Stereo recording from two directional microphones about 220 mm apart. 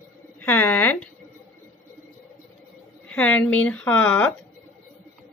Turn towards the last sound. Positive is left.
turn(degrees=5)  # may be behind; listen again after turning